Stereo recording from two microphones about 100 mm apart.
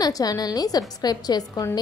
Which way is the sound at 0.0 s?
40° left (ahead or behind).